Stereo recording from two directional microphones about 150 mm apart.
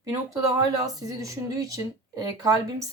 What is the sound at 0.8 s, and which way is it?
Speech, 25° right (ahead or behind).